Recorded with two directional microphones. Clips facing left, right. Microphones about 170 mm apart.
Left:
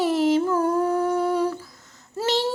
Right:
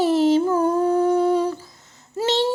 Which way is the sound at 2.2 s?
25° right (ahead or behind).